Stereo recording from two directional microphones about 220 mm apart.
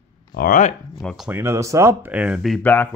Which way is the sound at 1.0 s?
Centre (ahead or behind).